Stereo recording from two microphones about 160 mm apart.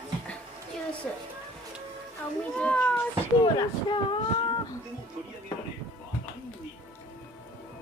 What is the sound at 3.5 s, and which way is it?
Speech, 30° left (ahead or behind).